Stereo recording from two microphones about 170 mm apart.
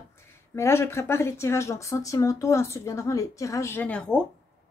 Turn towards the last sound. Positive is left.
turn(degrees=5)  # may be behind; listen again after turning